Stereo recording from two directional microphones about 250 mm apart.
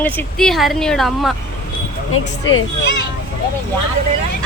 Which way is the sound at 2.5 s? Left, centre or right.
Left.